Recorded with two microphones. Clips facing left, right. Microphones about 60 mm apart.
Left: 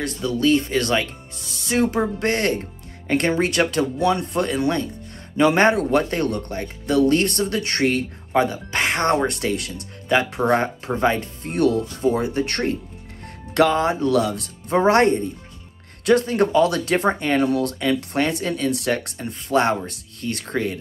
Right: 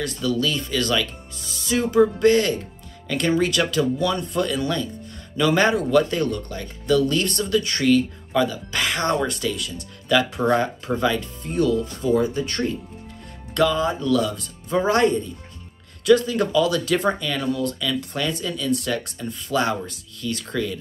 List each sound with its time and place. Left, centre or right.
0.2 s speech: left
10.0 s speech: left
11.4 s speech: left
12.0 s speech: left